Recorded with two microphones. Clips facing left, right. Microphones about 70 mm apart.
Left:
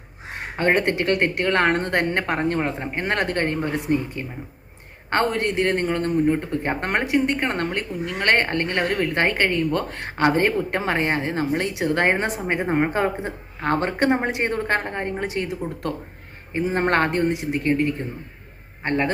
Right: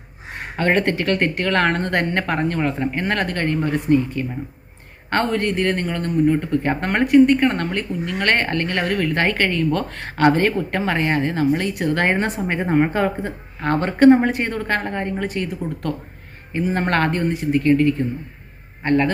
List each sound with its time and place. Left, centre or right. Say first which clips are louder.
0.7 s speech: right 1 dB; centre
11.3 s a man's voice: right 3 dB; left